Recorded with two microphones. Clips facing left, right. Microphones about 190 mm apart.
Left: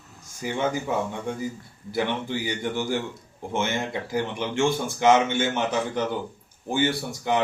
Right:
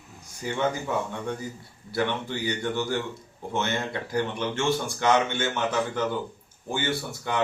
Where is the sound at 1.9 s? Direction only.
15° left (ahead or behind).